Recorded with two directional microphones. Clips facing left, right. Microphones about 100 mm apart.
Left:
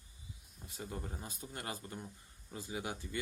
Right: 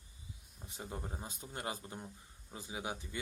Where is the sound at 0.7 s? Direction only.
20° right (ahead or behind).